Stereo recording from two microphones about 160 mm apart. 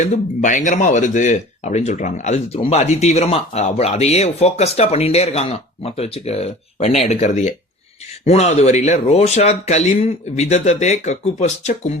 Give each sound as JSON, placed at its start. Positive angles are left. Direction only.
{"t": 0.0, "sound": "speech", "side_deg": 55}